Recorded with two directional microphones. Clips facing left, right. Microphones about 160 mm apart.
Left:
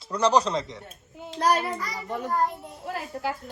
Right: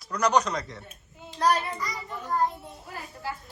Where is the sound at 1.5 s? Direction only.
45° left (ahead or behind).